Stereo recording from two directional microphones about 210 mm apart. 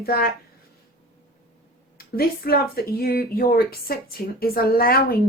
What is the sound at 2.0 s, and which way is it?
A woman's voice, 45° left (ahead or behind).